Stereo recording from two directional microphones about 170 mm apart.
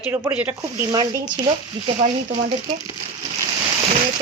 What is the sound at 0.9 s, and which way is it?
Speech, 25° right (ahead or behind).